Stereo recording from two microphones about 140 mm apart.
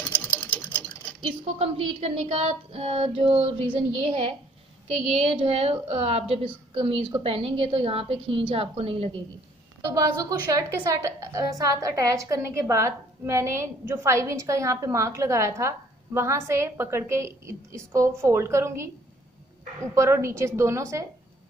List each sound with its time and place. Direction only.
0.1 s sewing machine: 10° left (ahead or behind)
1.2 s a woman's voice: 45° right (ahead or behind)
9.8 s a woman's voice: 30° right (ahead or behind)